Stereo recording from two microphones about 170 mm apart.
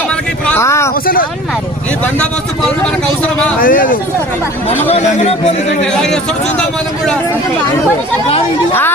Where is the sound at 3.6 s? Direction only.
55° left (ahead or behind).